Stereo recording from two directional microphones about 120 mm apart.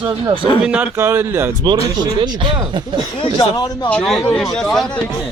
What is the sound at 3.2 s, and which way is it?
Speech, 45° left (ahead or behind).